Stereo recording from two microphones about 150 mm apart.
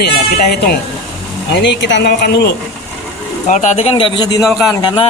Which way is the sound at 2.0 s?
90° left.